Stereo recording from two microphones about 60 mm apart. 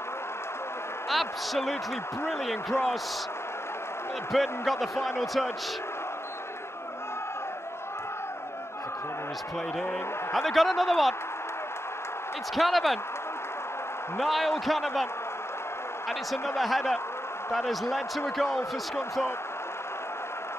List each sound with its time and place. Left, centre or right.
1.1 s speech: centre
4.3 s speech: centre
10.3 s speech: centre
12.5 s speech: centre
14.1 s speech: centre
16.1 s speech: centre